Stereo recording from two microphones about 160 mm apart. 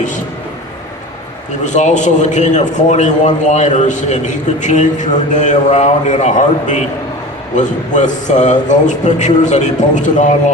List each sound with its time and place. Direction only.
1.6 s a man's voice: 50° left (ahead or behind)